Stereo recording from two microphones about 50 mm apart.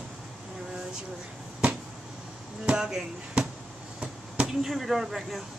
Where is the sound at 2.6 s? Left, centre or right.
Centre.